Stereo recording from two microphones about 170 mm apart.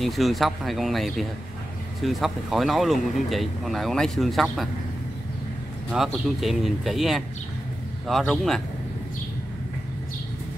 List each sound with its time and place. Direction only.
0.0 s speech: centre (ahead or behind)
6.1 s speech: centre (ahead or behind)